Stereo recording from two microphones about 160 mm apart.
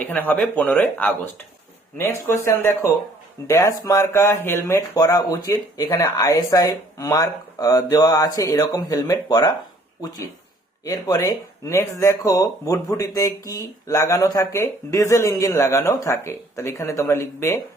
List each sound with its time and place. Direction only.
0.0 s speech: 10° left (ahead or behind)
10.8 s speech: 20° left (ahead or behind)